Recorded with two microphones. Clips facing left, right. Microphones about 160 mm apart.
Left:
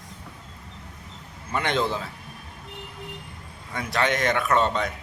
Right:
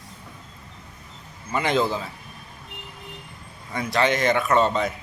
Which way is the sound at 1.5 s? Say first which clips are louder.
Right 3 dB; 5° right (ahead or behind).